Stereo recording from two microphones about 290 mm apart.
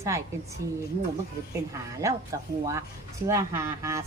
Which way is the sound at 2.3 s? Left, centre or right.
Centre.